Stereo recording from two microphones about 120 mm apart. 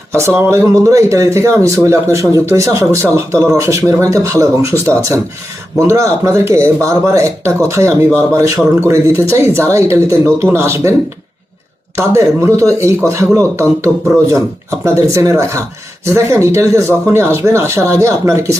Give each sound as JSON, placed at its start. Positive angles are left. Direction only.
{"t": 0.1, "sound": "speech", "side_deg": -20}
{"t": 11.9, "sound": "speech", "side_deg": -25}